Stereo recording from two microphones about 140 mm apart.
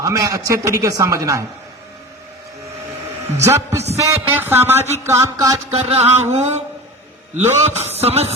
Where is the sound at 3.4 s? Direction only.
20° right (ahead or behind).